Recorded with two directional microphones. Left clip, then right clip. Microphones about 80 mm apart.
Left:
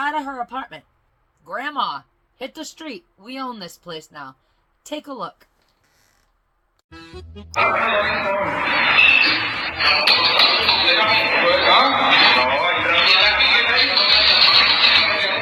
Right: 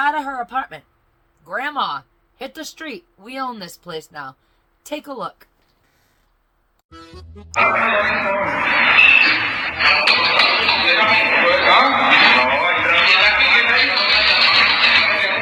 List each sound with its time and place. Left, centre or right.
0.0 s speech: right
6.9 s music: centre